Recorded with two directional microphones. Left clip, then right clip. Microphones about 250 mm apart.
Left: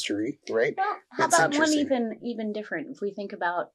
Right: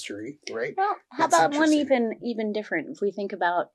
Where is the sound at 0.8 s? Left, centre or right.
Right.